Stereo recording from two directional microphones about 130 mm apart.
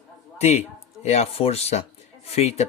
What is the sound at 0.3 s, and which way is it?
A man's voice, 55° left (ahead or behind).